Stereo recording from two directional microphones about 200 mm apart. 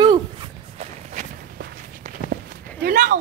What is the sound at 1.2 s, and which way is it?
Walk, 35° right (ahead or behind).